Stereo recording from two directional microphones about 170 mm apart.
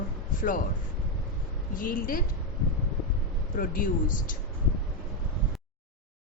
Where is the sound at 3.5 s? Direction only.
50° left (ahead or behind).